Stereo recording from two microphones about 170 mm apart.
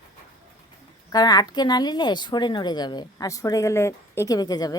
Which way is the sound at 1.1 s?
25° left (ahead or behind).